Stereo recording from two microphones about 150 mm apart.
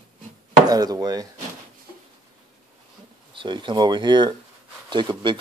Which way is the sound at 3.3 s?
30° right (ahead or behind).